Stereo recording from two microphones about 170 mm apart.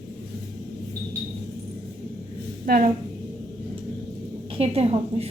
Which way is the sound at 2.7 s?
55° right (ahead or behind).